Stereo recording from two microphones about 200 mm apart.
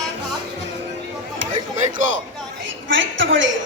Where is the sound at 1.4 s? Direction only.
70° right (ahead or behind).